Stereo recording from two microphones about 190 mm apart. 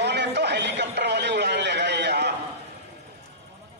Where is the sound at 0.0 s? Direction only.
65° right (ahead or behind).